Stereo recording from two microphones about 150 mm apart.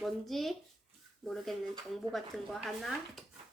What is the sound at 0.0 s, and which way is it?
Speech, centre (ahead or behind).